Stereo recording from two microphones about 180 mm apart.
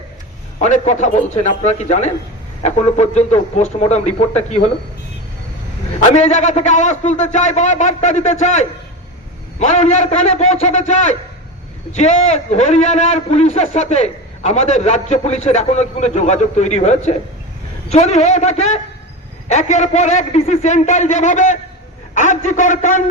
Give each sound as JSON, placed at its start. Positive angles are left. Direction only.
{"t": 0.6, "sound": "a man's voice", "side_deg": 40}
{"t": 6.0, "sound": "a man's voice", "side_deg": 40}